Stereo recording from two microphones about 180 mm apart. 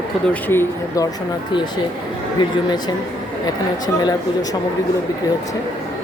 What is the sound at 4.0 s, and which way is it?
Speech, 20° left (ahead or behind).